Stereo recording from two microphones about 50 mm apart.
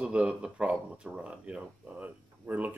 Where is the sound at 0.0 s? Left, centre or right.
Right.